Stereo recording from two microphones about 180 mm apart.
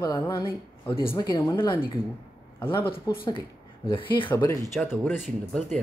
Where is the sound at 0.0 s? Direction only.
15° left (ahead or behind).